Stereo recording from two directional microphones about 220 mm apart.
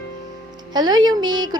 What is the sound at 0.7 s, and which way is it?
Speech, 20° right (ahead or behind).